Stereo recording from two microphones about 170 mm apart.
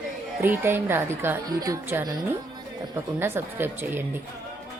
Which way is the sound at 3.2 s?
15° right (ahead or behind).